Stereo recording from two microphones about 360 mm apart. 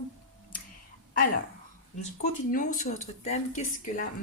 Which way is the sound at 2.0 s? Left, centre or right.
Centre.